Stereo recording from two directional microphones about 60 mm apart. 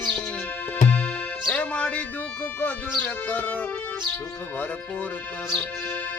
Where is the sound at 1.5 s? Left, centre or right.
Centre.